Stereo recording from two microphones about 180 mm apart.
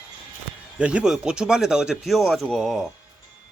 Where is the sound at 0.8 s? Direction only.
5° right (ahead or behind).